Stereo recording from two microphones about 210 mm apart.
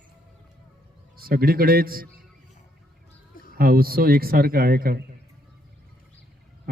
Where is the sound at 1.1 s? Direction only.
45° right (ahead or behind).